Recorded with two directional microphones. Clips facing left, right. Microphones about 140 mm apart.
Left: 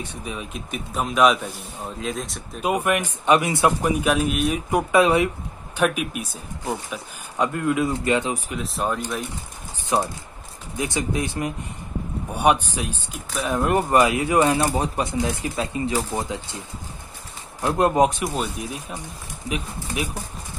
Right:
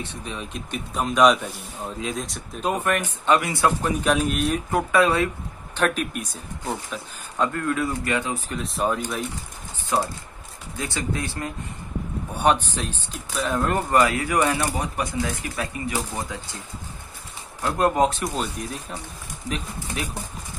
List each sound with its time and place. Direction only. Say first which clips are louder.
0.0 s a man's voice: left 1 dB; 10° left (ahead or behind)
2.6 s speech: left 2 dB; 10° left (ahead or behind)
4.0 s speech: right 2 dB; 5° left (ahead or behind); by 5.3 s 20° left (ahead or behind)
5.8 s speech: left 1 dB; 10° left (ahead or behind)
8.5 s a man's voice: right 1 dB; centre (ahead or behind)
9.9 s speech: left 1 dB; 20° left (ahead or behind)
17.6 s speech: left 2 dB; 20° left (ahead or behind)